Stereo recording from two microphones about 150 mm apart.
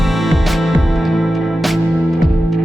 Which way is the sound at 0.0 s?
Centre (ahead or behind).